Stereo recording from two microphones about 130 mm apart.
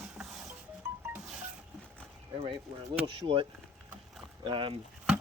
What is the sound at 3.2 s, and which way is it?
Speech, 45° right (ahead or behind).